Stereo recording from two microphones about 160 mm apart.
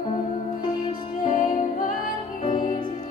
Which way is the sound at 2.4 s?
30° left (ahead or behind).